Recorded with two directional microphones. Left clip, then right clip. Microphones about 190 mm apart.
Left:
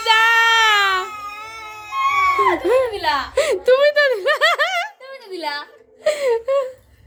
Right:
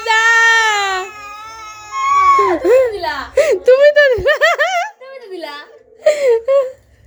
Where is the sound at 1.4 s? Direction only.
45° right (ahead or behind).